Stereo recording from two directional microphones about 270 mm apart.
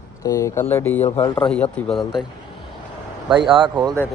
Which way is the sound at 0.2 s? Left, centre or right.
Centre.